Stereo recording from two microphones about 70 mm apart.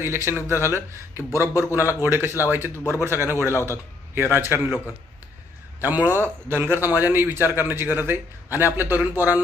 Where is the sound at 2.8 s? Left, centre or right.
Left.